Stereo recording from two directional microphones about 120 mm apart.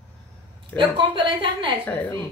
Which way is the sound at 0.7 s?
40° right (ahead or behind).